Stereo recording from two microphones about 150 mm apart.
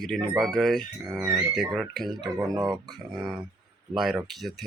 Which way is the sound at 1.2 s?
20° right (ahead or behind).